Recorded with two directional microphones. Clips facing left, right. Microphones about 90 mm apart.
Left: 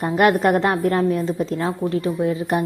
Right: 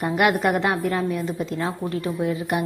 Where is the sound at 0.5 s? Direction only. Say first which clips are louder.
Left 4 dB; 40° left (ahead or behind).